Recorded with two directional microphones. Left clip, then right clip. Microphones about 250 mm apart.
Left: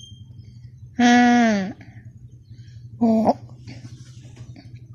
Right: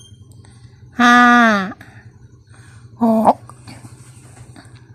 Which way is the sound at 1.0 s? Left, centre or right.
Right.